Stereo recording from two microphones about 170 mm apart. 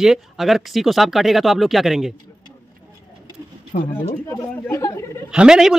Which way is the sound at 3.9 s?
15° left (ahead or behind).